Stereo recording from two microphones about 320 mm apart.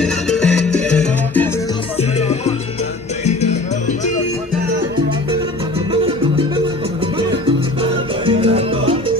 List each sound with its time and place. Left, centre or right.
0.3 s salsa music: centre
2.1 s music: centre
6.0 s music: centre
7.8 s salsa music: centre